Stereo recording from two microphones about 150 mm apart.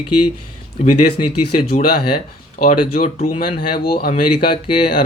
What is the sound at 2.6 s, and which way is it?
Speech, 80° left.